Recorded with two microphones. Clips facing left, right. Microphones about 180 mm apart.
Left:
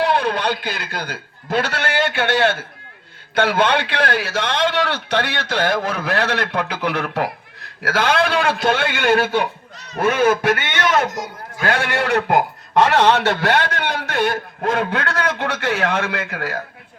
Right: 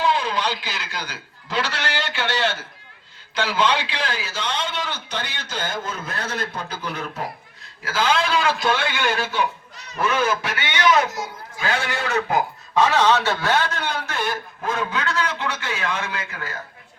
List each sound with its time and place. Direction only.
0.0 s a man's voice: 60° left (ahead or behind)